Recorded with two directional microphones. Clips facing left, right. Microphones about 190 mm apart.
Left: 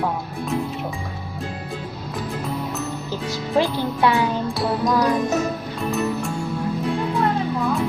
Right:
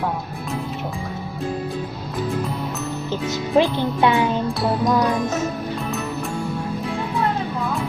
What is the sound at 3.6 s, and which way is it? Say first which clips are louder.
Speech: right 2 dB; 20° right (ahead or behind).